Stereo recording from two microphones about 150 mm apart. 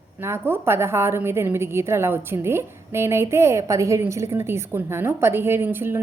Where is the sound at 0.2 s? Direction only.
15° right (ahead or behind).